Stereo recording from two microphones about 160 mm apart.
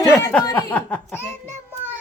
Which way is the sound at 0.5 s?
10° left (ahead or behind).